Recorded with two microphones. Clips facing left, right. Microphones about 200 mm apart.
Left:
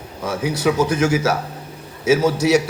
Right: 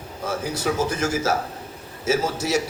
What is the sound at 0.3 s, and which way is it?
A man's voice, 65° left (ahead or behind).